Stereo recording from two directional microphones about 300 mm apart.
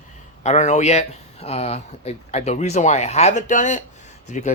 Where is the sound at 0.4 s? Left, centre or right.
Left.